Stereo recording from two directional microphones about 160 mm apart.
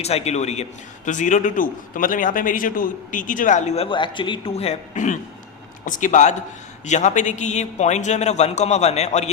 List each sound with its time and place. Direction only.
0.0 s a man's voice: 40° left (ahead or behind)